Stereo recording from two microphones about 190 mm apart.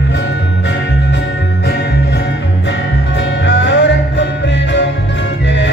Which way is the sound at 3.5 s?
70° left (ahead or behind).